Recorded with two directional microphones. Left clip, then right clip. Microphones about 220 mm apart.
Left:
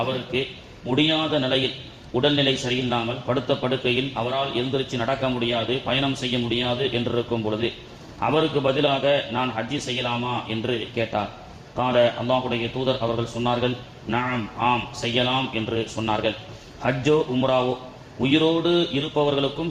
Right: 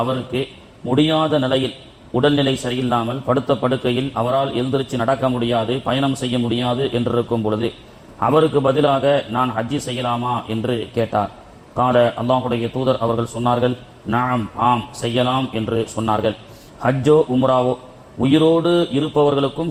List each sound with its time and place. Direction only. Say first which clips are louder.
0.9 s a man's voice: right 5 dB; 35° right (ahead or behind)